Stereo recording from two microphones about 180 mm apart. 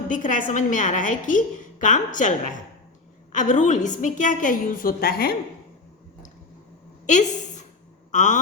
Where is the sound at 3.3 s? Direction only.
45° left (ahead or behind).